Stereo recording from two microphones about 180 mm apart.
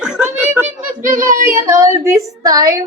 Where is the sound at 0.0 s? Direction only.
5° right (ahead or behind).